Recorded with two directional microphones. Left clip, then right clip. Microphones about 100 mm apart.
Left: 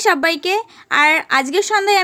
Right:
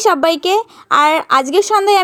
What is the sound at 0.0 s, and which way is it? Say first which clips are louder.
Speech: right 3 dB; 25° right (ahead or behind).